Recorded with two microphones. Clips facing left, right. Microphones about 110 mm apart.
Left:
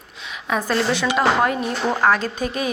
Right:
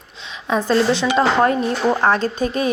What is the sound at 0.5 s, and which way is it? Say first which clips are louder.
Speech: right 4 dB; 30° right (ahead or behind).